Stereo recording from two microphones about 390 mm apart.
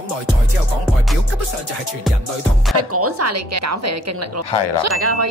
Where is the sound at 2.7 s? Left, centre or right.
Right.